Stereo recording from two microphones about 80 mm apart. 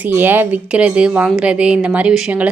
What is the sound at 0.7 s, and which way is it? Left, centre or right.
A woman's voice, centre.